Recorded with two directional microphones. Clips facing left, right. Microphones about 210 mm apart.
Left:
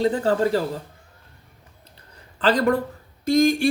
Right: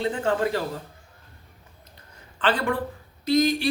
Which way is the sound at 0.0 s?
35° left (ahead or behind).